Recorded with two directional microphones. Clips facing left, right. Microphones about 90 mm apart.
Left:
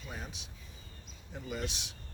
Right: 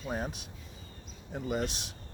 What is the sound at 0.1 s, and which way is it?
Speech, 45° right (ahead or behind).